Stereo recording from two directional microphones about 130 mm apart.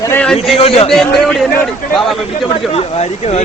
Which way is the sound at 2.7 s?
50° left (ahead or behind).